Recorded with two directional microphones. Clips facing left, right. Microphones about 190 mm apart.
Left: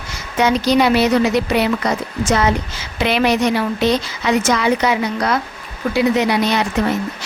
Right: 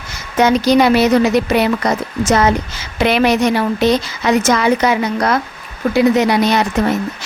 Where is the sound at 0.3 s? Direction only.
45° right (ahead or behind).